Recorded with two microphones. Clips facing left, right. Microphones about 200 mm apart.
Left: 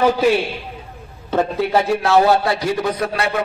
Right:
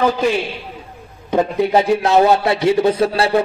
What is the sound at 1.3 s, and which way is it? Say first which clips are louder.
A man's voice: right 3 dB; 15° right (ahead or behind).